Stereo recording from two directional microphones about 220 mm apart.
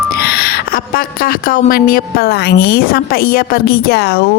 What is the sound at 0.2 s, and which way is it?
Speech, 45° left (ahead or behind).